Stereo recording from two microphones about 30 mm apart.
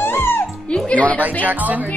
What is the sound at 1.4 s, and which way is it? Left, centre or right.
Speech, right.